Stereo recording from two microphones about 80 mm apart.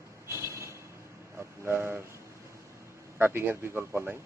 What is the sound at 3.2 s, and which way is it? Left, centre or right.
A man's voice, right.